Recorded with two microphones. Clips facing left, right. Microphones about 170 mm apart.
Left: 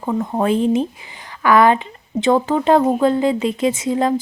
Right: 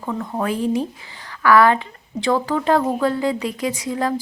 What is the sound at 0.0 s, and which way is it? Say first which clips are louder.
A woman's voice: left 5 dB; 20° left (ahead or behind).